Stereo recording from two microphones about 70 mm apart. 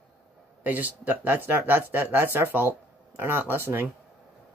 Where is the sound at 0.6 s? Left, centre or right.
Right.